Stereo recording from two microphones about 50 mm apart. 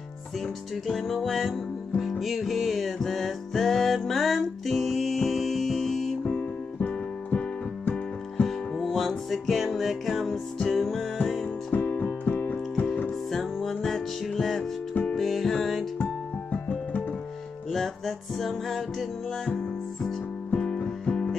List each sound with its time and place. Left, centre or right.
0.8 s music: centre
6.2 s music: left
7.2 s keyboard: left
8.5 s music: centre
11.7 s keyboard: left
13.6 s music: centre
16.5 s music: left
17.6 s music: centre
20.5 s music: left